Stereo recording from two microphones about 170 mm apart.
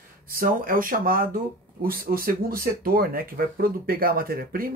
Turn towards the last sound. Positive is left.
turn(degrees=-60)  # may be behind; listen again after turning